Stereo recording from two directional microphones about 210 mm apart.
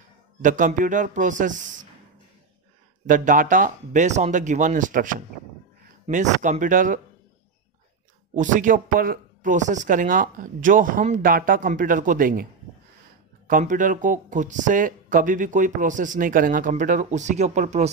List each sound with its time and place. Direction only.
0.4 s speech: 40° right (ahead or behind)
3.1 s speech: 40° right (ahead or behind)
8.4 s speech: 40° right (ahead or behind)
13.5 s speech: 40° right (ahead or behind)